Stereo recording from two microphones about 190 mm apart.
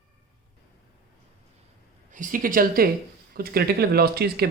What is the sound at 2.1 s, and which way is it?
Speech, 45° right (ahead or behind).